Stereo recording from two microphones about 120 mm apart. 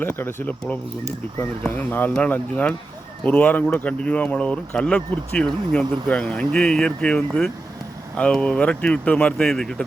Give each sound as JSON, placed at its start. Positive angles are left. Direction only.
{"t": 0.0, "sound": "speech", "side_deg": 20}